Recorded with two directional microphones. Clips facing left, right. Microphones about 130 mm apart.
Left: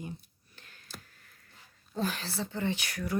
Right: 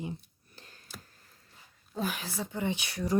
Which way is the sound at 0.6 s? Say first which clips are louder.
Right 3 dB; 35° right (ahead or behind).